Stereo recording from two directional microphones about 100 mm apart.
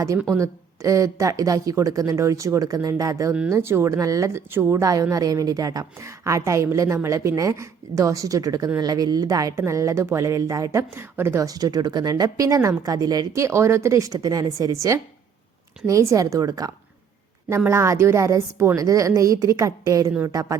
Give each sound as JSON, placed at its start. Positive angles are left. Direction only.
{"t": 0.3, "sound": "a woman's voice", "side_deg": -30}
{"t": 3.5, "sound": "a woman's voice", "side_deg": -25}
{"t": 11.4, "sound": "a woman's voice", "side_deg": -40}